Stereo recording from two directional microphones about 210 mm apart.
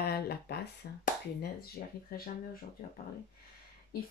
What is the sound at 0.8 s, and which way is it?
Speech, 45° left (ahead or behind).